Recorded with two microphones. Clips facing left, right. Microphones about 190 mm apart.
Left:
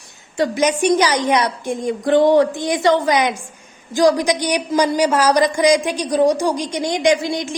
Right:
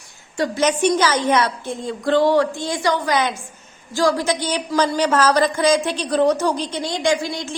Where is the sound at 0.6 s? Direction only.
10° left (ahead or behind).